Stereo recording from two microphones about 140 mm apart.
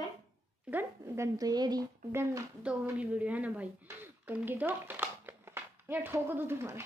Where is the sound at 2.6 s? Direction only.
10° right (ahead or behind).